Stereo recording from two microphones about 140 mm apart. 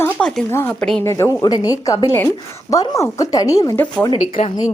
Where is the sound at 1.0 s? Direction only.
20° left (ahead or behind).